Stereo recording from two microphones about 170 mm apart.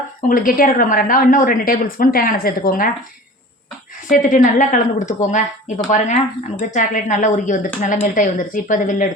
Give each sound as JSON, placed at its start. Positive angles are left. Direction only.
{"t": 0.2, "sound": "a woman's voice", "side_deg": 55}
{"t": 4.1, "sound": "speech", "side_deg": 50}